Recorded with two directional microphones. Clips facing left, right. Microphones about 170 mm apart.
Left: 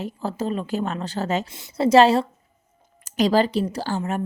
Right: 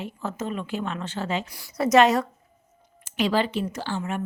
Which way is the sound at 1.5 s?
30° left (ahead or behind).